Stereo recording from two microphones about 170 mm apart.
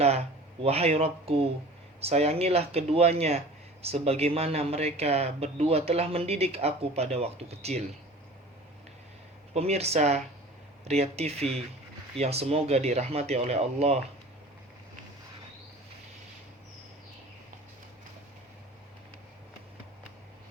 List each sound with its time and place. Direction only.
0.6 s speech: 35° right (ahead or behind)
9.6 s speech: 40° right (ahead or behind)